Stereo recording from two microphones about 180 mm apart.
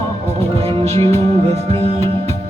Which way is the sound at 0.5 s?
30° right (ahead or behind).